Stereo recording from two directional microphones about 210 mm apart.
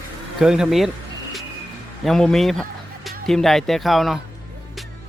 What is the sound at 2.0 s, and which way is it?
Speech, centre (ahead or behind).